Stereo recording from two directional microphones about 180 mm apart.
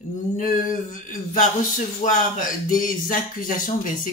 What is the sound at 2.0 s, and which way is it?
Mantra, 50° left (ahead or behind).